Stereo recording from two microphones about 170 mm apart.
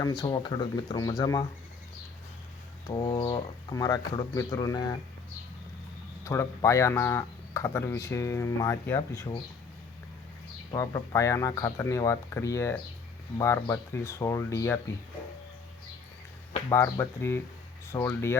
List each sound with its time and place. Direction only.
0.0 s speech: 25° left (ahead or behind)
2.8 s speech: 25° left (ahead or behind)
6.2 s speech: 15° left (ahead or behind)
9.0 s speech: 25° left (ahead or behind)
10.7 s speech: 20° left (ahead or behind)
16.6 s speech: 15° left (ahead or behind)